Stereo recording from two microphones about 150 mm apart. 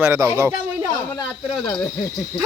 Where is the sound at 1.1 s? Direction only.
25° left (ahead or behind).